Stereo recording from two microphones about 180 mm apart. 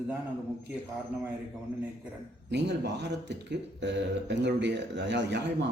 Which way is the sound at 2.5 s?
70° right (ahead or behind).